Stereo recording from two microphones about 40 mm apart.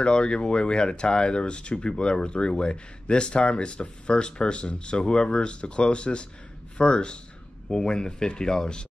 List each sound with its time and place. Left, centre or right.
0.0 s speech: left